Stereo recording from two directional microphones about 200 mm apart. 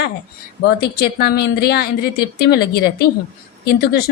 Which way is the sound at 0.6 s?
55° left (ahead or behind).